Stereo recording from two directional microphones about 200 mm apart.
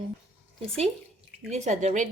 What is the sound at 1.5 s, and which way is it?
Speech, 35° right (ahead or behind).